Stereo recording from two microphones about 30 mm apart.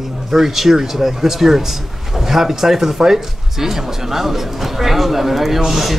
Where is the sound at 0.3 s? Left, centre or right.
Centre.